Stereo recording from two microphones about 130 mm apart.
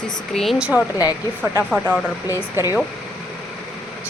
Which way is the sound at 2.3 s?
25° left (ahead or behind).